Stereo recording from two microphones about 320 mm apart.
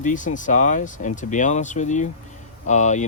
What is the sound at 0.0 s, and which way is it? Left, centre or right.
Speech, left.